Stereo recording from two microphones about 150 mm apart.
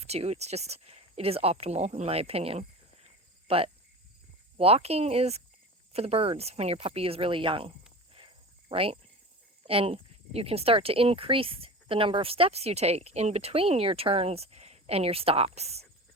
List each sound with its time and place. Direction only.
0.0 s speech: 45° right (ahead or behind)
8.7 s speech: 40° right (ahead or behind)